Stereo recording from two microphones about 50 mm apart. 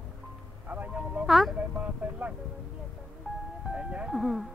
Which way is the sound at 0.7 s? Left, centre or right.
Right.